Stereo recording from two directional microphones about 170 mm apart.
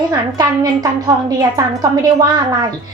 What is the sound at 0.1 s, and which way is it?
A woman's voice, 25° right (ahead or behind).